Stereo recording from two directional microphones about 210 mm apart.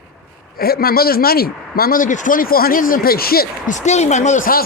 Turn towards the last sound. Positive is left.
turn(degrees=45)  # may be behind; listen again after turning